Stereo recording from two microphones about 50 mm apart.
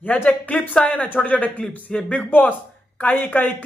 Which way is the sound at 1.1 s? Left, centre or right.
Left.